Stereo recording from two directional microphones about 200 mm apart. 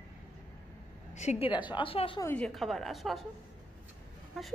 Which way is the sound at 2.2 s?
5° left (ahead or behind).